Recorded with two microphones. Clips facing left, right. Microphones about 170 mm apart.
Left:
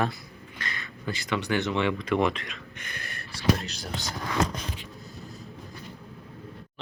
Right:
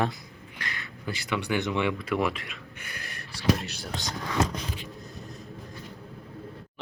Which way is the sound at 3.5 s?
Centre (ahead or behind).